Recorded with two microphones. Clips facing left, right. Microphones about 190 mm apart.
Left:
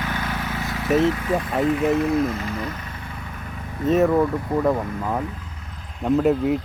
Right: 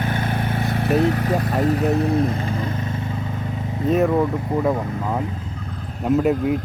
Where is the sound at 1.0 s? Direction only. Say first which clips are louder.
Even; 40° right (ahead or behind).